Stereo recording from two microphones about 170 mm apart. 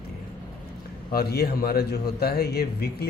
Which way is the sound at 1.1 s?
65° left (ahead or behind).